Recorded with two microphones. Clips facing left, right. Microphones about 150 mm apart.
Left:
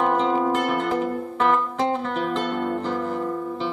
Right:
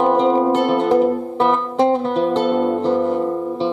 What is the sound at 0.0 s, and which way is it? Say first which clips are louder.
Music: right 6 dB; 30° right (ahead or behind).